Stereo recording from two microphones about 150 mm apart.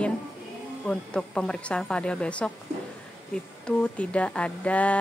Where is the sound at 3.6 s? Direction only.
5° left (ahead or behind).